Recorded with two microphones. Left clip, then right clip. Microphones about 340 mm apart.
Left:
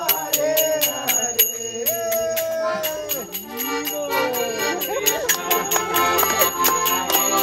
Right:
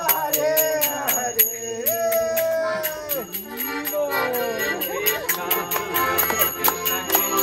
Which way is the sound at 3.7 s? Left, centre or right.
Centre.